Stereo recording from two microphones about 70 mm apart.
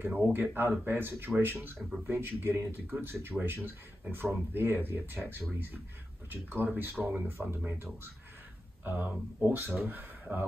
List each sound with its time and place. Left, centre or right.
0.0 s speech: right